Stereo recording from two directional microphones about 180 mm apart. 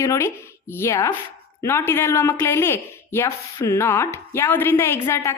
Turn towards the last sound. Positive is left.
turn(degrees=15)  # may be behind; listen again after turning